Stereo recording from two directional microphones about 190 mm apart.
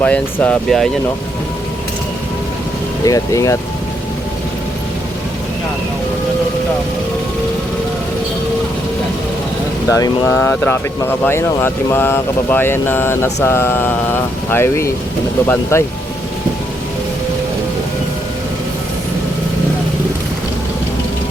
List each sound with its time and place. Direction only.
0.0 s speech: 5° left (ahead or behind)
3.0 s speech: 15° left (ahead or behind)
9.9 s speech: 15° left (ahead or behind)